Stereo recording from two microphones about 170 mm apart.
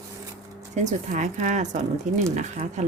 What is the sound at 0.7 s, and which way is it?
Speech, 45° right (ahead or behind).